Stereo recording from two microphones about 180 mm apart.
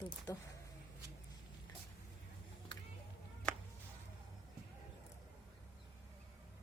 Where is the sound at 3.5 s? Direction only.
5° left (ahead or behind).